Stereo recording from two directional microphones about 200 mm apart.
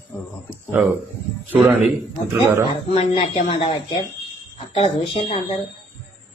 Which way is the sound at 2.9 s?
30° left (ahead or behind).